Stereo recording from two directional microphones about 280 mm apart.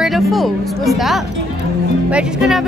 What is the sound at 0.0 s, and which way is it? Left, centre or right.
Speech, centre.